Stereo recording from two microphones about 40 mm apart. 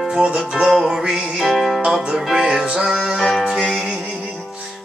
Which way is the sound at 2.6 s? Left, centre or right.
Right.